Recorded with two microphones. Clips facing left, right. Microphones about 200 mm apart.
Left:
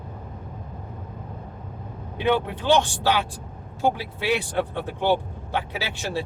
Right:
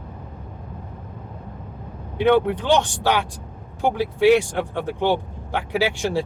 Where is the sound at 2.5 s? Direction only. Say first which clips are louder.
Right 1 dB; 15° right (ahead or behind).